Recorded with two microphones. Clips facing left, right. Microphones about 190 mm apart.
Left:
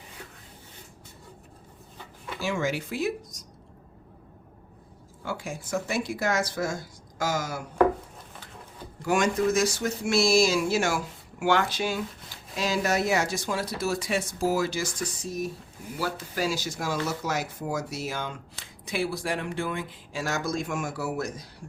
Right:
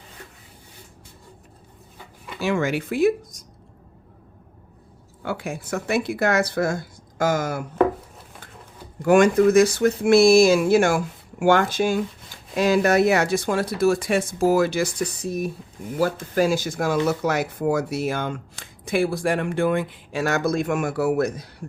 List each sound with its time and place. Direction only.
2.4 s speech: 60° right (ahead or behind)
5.2 s speech: 60° right (ahead or behind)
9.0 s speech: 55° right (ahead or behind)
16.0 s speech: 50° right (ahead or behind)